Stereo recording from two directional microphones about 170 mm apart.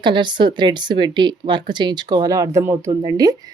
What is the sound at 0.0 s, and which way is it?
Speech, 25° right (ahead or behind).